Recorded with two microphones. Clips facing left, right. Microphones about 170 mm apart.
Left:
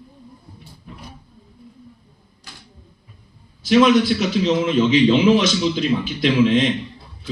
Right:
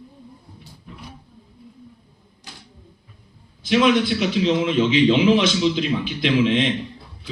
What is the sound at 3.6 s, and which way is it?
A man's voice, 45° left (ahead or behind).